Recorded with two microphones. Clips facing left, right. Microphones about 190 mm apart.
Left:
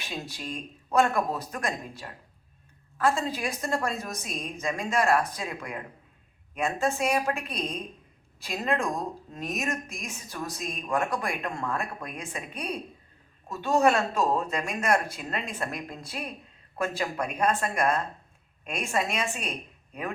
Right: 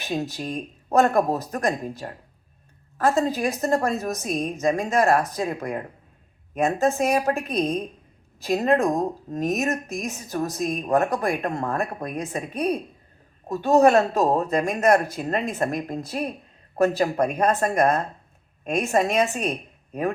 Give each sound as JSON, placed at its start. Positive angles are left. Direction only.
{"t": 0.0, "sound": "a woman's voice", "side_deg": -40}